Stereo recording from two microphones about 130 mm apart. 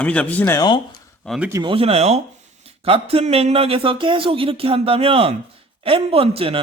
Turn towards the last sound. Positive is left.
turn(degrees=-45)  # may be behind; listen again after turning